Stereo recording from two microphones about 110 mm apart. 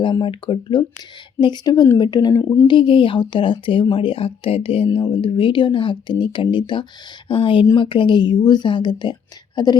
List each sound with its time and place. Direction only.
0.0 s speech: 45° left (ahead or behind)
2.3 s speech: 25° left (ahead or behind)
2.6 s speech: 50° left (ahead or behind)
4.9 s speech: 50° left (ahead or behind)